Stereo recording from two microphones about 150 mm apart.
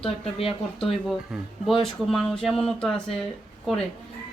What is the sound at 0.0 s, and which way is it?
Speech, 40° left (ahead or behind).